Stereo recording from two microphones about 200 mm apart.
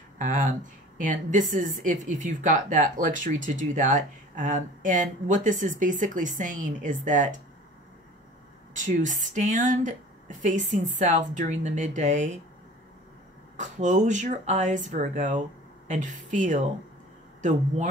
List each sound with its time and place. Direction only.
0.2 s speech: 40° right (ahead or behind)
8.7 s speech: 40° right (ahead or behind)
13.6 s speech: 35° right (ahead or behind)